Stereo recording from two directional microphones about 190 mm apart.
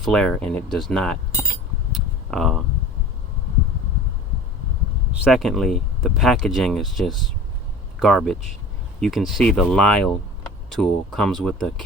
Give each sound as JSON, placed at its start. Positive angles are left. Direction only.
{"t": 0.0, "sound": "speech", "side_deg": 5}
{"t": 1.9, "sound": "a sound", "side_deg": 0}
{"t": 5.2, "sound": "speech", "side_deg": 0}